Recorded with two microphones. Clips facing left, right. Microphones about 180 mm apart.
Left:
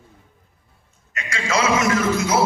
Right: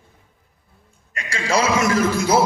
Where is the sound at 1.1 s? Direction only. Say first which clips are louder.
Right 2 dB; 30° right (ahead or behind).